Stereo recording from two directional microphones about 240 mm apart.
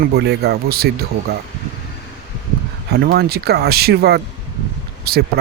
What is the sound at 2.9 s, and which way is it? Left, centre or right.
Speech, right.